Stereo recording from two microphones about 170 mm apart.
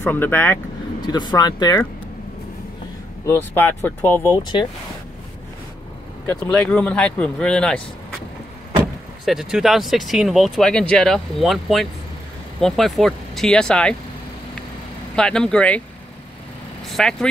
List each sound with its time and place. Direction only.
0.0 s speech: 10° left (ahead or behind)
1.0 s speech: 25° left (ahead or behind)
3.3 s speech: 10° left (ahead or behind)
6.5 s speech: 5° left (ahead or behind)
9.2 s speech: centre (ahead or behind)
15.1 s speech: 5° left (ahead or behind)
16.9 s speech: 5° left (ahead or behind)